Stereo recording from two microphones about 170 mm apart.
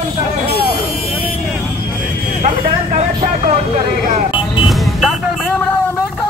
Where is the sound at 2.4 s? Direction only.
40° right (ahead or behind).